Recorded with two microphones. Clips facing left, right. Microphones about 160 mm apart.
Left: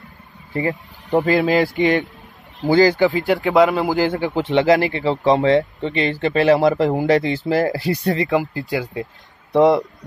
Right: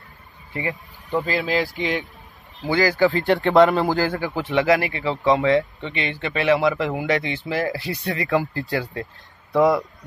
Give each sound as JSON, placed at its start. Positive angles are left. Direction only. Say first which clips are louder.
{"t": 0.5, "sound": "speech", "louder": "left 6 dB", "side_deg": 40}
{"t": 1.3, "sound": "speech", "louder": "left 8 dB", "side_deg": 60}
{"t": 2.8, "sound": "speech", "louder": "left 3 dB", "side_deg": 20}
{"t": 3.2, "sound": "speech", "louder": "even", "side_deg": 5}
{"t": 3.9, "sound": "speech", "louder": "left 4 dB", "side_deg": 20}
{"t": 8.2, "sound": "speech", "louder": "left 3 dB", "side_deg": 20}